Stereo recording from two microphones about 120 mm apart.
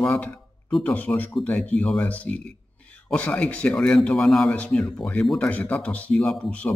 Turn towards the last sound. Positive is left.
turn(degrees=10)  # may be behind; listen again after turning